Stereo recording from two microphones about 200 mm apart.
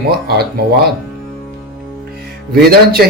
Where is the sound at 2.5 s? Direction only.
50° right (ahead or behind).